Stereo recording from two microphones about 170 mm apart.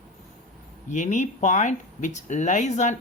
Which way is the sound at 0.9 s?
45° left (ahead or behind).